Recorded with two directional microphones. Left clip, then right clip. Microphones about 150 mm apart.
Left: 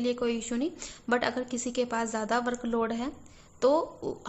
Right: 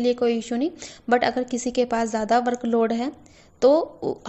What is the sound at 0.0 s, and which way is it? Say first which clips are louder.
A woman's voice: right 8 dB; 30° right (ahead or behind).